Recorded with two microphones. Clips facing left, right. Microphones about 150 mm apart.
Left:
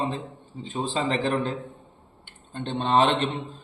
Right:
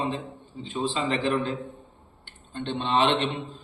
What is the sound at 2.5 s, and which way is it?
Speech, 45° left (ahead or behind).